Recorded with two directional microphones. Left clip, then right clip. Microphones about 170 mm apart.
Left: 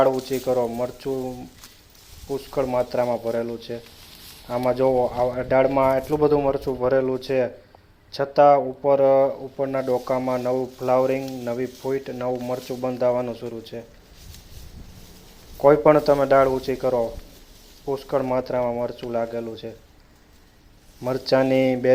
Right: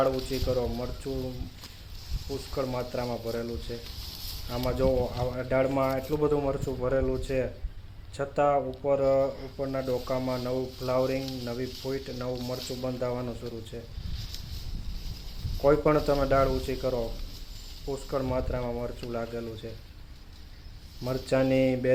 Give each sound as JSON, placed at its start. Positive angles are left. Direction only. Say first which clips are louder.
{"t": 0.0, "sound": "speech", "louder": "left 7 dB", "side_deg": 15}
{"t": 2.6, "sound": "speech", "louder": "left 10 dB", "side_deg": 15}
{"t": 15.6, "sound": "speech", "louder": "left 8 dB", "side_deg": 10}
{"t": 21.0, "sound": "speech", "louder": "left 7 dB", "side_deg": 15}